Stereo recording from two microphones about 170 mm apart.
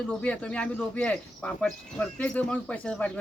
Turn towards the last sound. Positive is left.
turn(degrees=5)  # may be behind; listen again after turning